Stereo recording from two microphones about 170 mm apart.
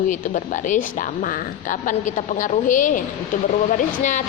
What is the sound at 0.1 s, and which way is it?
Speech, 45° left (ahead or behind).